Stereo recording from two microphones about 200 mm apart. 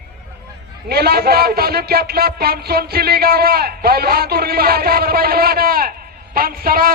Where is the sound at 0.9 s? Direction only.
50° right (ahead or behind).